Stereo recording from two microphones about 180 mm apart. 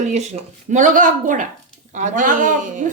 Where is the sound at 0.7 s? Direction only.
45° right (ahead or behind).